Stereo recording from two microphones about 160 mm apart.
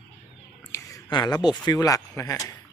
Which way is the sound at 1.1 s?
25° left (ahead or behind).